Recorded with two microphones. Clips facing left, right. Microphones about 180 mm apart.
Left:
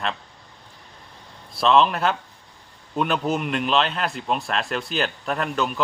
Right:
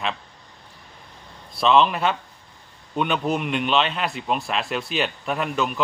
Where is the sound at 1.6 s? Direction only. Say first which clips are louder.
Even; centre (ahead or behind).